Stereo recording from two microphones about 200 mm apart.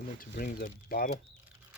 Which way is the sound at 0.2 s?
45° left (ahead or behind).